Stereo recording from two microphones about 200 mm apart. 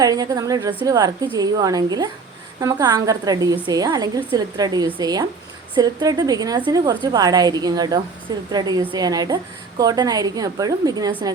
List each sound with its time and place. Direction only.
0.0 s a woman's voice: 20° right (ahead or behind)